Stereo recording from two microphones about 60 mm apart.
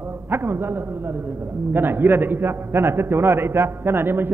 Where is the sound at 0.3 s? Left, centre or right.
Right.